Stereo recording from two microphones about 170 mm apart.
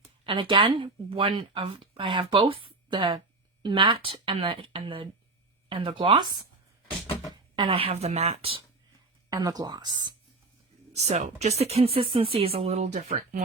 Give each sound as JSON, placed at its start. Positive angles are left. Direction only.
{"t": 0.3, "sound": "speech", "side_deg": -30}
{"t": 7.5, "sound": "speech", "side_deg": -30}
{"t": 9.3, "sound": "speech", "side_deg": -25}
{"t": 10.9, "sound": "speech", "side_deg": -40}